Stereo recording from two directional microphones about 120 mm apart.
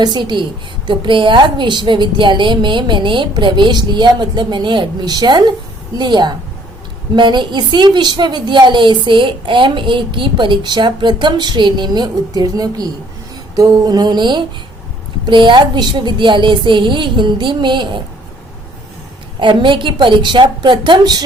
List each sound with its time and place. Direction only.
0.0 s a woman's voice: 35° right (ahead or behind)
19.4 s a woman's voice: 45° right (ahead or behind)